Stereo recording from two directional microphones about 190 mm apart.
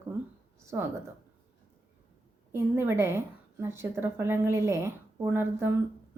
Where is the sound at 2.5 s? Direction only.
10° right (ahead or behind).